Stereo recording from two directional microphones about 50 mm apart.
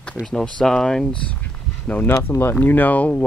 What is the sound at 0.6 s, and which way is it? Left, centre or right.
Speech, centre.